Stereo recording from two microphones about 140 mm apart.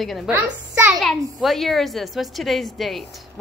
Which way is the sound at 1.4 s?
Centre (ahead or behind).